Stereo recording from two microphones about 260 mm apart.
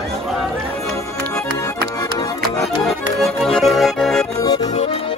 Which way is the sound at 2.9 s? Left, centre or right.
Centre.